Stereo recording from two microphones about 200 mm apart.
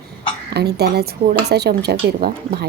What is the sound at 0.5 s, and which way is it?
A woman's voice, 55° right (ahead or behind).